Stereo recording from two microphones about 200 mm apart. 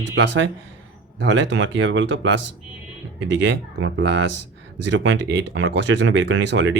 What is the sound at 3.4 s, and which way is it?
Speech, 65° right (ahead or behind).